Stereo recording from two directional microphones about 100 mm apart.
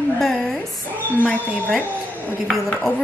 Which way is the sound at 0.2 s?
5° left (ahead or behind).